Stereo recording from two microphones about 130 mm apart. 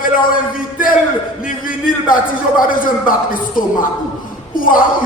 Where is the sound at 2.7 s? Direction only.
90° left.